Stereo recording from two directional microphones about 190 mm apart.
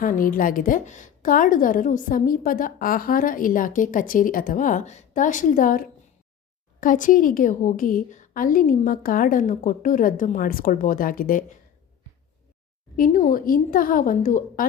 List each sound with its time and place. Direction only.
0.0 s a woman's voice: 45° left (ahead or behind)
13.0 s a woman's voice: 45° left (ahead or behind)